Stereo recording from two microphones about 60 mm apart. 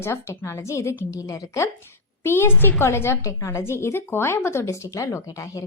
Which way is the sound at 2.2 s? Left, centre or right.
Left.